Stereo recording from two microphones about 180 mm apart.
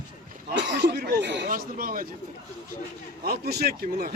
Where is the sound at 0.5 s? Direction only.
65° right (ahead or behind).